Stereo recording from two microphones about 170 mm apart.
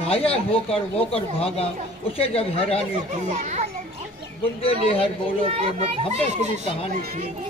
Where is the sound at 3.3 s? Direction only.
45° right (ahead or behind).